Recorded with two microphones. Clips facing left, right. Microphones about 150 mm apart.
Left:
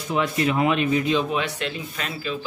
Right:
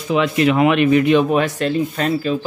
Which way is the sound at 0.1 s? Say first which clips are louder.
Right 7 dB; 85° right.